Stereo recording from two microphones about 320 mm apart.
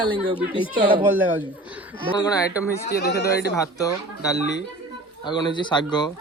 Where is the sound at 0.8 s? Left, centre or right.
Centre.